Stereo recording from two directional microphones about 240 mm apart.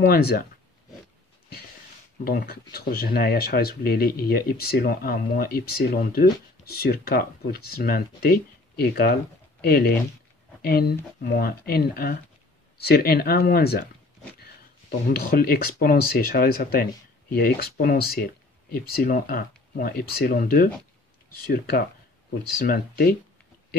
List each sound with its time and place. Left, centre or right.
0.0 s speech: left
2.2 s speech: left
15.1 s speech: left